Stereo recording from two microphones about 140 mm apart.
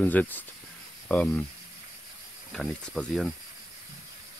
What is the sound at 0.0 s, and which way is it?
Speech, 10° left (ahead or behind).